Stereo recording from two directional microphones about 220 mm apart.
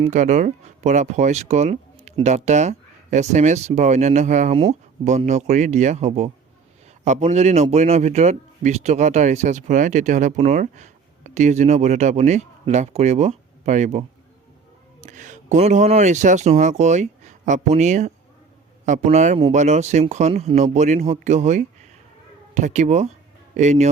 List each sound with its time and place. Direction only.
0.0 s a man's voice: 35° right (ahead or behind)
15.0 s a man's voice: 35° right (ahead or behind)